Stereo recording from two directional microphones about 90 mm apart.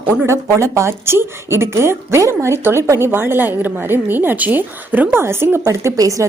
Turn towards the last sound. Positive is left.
turn(degrees=-40)  # may be behind; listen again after turning